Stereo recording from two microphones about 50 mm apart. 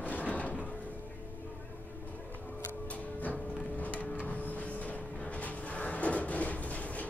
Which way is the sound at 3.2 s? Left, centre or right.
Left.